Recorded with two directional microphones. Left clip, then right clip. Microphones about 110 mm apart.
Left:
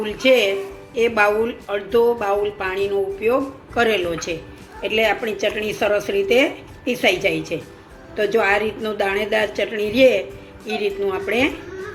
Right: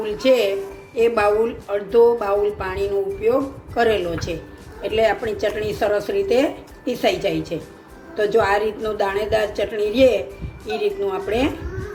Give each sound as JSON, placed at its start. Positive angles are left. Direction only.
{"t": 0.0, "sound": "a woman's voice", "side_deg": 35}